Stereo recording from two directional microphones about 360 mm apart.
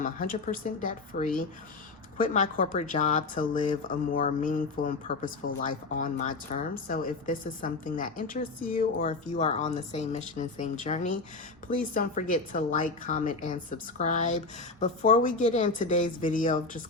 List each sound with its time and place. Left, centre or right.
0.0 s speech: left